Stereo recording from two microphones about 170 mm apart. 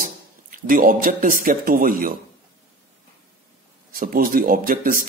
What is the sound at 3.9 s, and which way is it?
A man's voice, 55° right (ahead or behind).